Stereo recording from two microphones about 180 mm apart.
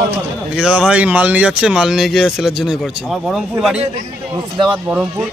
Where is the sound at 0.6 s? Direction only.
5° right (ahead or behind).